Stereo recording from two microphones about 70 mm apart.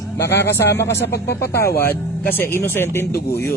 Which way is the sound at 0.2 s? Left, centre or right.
Left.